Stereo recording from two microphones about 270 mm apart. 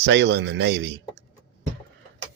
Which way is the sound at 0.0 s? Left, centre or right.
Right.